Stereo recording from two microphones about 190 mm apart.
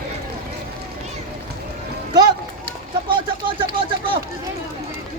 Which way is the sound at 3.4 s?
25° right (ahead or behind).